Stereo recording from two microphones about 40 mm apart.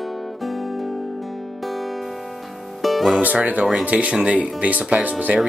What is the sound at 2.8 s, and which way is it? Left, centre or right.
Music, centre.